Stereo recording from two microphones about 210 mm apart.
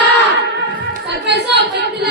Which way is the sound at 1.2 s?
55° right (ahead or behind).